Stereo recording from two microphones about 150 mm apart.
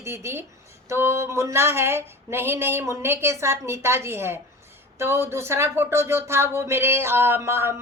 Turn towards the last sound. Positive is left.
turn(degrees=-15)  # may be behind; listen again after turning